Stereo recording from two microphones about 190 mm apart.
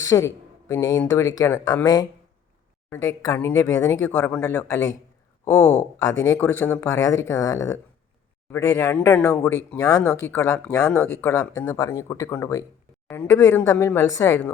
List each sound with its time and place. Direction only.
0.0 s speech: 15° left (ahead or behind)